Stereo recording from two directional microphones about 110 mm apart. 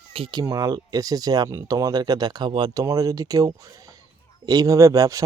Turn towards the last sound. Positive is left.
turn(degrees=-30)  # may be behind; listen again after turning